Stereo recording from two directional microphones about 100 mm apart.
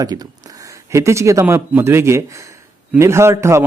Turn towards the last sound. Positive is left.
turn(degrees=-25)  # may be behind; listen again after turning